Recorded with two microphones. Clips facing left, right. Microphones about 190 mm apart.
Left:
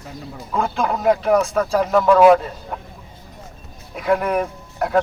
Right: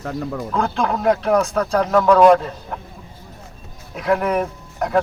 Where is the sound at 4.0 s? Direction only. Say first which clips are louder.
Even; centre (ahead or behind).